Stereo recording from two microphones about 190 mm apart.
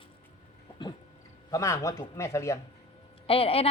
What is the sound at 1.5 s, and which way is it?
Speech, 15° left (ahead or behind).